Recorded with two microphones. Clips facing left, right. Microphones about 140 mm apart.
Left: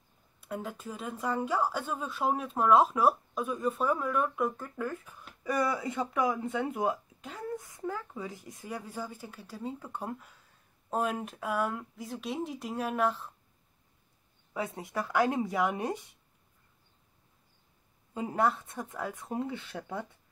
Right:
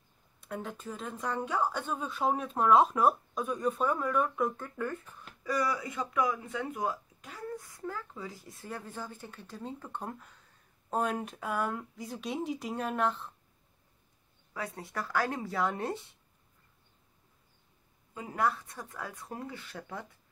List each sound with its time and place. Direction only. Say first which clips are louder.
0.4 s speech: left 1 dB; 5° left (ahead or behind)
5.4 s speech: left 2 dB; 25° left (ahead or behind); by 13.3 s 5° left (ahead or behind)
14.5 s speech: left 4 dB; 20° left (ahead or behind)
18.1 s speech: left 3 dB; 25° left (ahead or behind)